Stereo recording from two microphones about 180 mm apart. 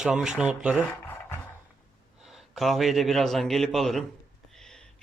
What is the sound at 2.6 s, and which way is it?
A man's voice, centre (ahead or behind).